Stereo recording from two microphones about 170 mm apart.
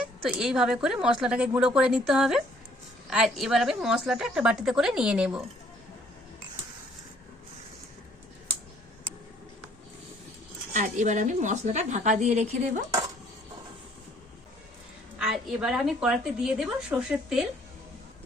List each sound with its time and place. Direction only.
0.3 s a woman's voice: 5° right (ahead or behind)
10.8 s a woman's voice: 45° right (ahead or behind)
15.2 s a woman's voice: 5° right (ahead or behind)